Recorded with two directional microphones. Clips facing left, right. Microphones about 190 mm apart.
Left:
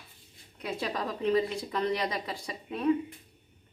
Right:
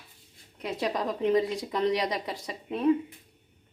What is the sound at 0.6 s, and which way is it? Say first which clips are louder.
A woman's voice: right 3 dB; 20° right (ahead or behind).